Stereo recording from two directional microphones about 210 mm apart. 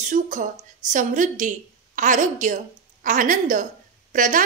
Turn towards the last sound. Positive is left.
turn(degrees=-40)  # may be behind; listen again after turning